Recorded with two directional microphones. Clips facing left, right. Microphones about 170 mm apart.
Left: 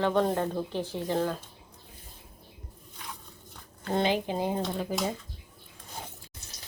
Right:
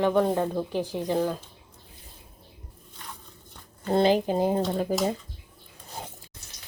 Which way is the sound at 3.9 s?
40° right (ahead or behind).